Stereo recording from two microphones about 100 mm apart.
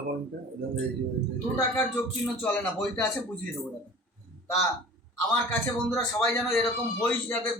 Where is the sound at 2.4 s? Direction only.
15° left (ahead or behind).